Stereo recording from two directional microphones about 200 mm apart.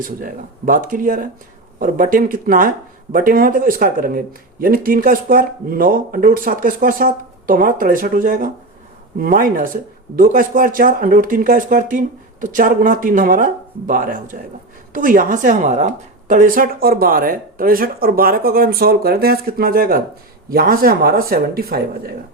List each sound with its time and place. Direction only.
0.0 s speech: 45° right (ahead or behind)